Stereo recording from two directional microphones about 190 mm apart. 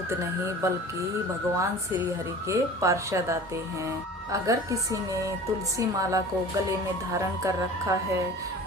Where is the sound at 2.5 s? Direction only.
15° right (ahead or behind).